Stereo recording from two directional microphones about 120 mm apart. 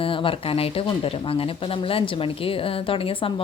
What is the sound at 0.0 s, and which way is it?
Speech, 50° left (ahead or behind).